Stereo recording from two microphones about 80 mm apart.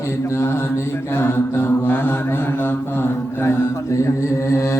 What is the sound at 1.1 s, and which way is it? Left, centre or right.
A capella, left.